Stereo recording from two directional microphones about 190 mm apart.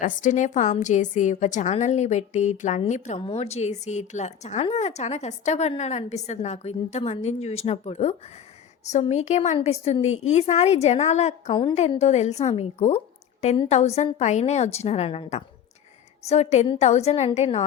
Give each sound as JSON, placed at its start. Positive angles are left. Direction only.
{"t": 0.0, "sound": "a woman's voice", "side_deg": 45}